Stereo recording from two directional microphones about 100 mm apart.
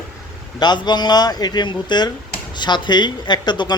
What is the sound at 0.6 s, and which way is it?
Speech, 45° left (ahead or behind).